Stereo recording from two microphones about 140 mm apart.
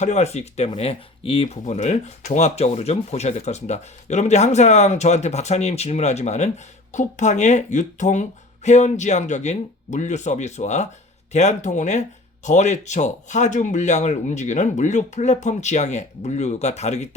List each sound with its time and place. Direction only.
0.0 s speech: 55° left (ahead or behind)
1.6 s speech: 55° left (ahead or behind)